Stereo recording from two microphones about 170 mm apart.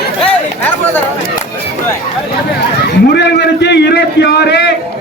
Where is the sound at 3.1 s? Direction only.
80° left.